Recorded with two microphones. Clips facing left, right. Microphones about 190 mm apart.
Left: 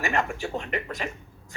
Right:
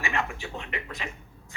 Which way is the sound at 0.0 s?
45° left (ahead or behind).